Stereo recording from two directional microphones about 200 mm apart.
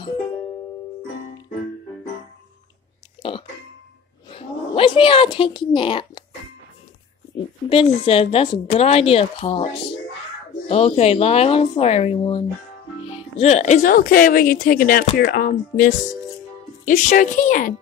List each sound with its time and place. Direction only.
3.2 s burping: 25° left (ahead or behind)
4.3 s speech: 25° left (ahead or behind)
7.7 s a woman's voice: 30° left (ahead or behind)
10.7 s a woman's voice: 30° left (ahead or behind)